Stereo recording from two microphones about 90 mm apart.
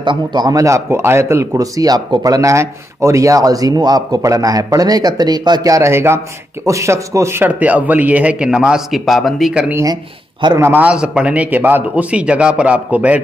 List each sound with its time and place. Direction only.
0.0 s a man's voice: 60° right (ahead or behind)
0.6 s speech: 35° right (ahead or behind)
7.4 s a man's voice: 15° right (ahead or behind); by 9.5 s centre (ahead or behind)
9.5 s a man's voice: 15° right (ahead or behind)